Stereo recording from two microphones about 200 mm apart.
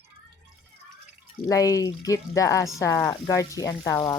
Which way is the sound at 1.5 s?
15° left (ahead or behind).